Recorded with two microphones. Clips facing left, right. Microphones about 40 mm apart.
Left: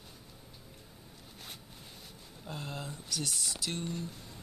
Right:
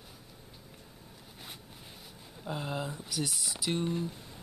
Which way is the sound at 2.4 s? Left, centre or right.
Centre.